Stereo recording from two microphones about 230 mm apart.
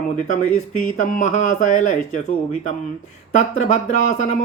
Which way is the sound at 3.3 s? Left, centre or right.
Left.